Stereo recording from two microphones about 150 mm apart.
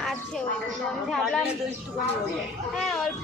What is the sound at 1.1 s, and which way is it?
Speech, centre (ahead or behind).